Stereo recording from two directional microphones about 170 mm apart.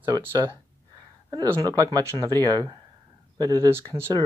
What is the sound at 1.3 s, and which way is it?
Speech, 20° right (ahead or behind).